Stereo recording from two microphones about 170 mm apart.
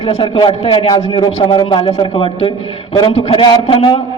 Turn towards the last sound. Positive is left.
turn(degrees=30)  # may be behind; listen again after turning